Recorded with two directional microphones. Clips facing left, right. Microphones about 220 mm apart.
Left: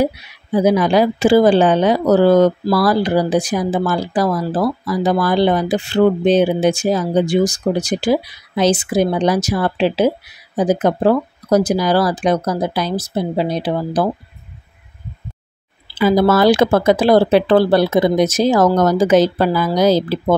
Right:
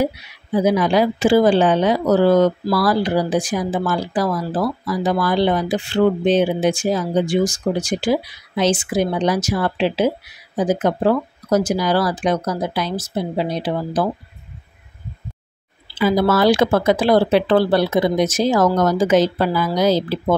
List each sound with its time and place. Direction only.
0.7 s speech: 40° left (ahead or behind)
16.0 s speech: 45° left (ahead or behind)